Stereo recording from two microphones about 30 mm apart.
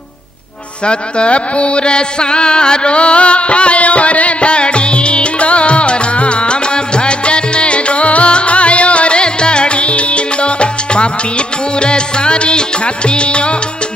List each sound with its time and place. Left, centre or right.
0.8 s music: left